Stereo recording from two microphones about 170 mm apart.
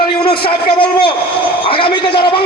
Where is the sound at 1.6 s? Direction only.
30° left (ahead or behind).